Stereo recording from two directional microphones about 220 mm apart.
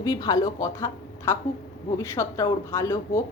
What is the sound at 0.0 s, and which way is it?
Speech, 15° left (ahead or behind).